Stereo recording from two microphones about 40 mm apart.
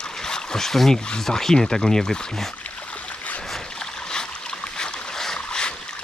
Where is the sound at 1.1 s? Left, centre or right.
Centre.